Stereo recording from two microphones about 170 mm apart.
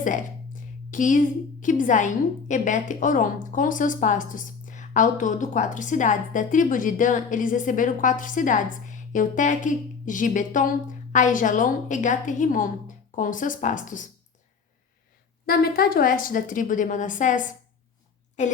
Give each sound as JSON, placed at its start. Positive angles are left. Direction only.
{"t": 0.0, "sound": "a woman's voice", "side_deg": 50}
{"t": 15.4, "sound": "a woman's voice", "side_deg": 65}